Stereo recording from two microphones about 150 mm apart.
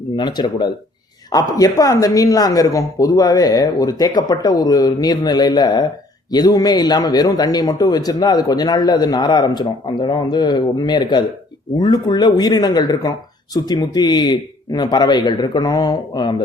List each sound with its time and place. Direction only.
0.2 s a man's voice: 30° left (ahead or behind)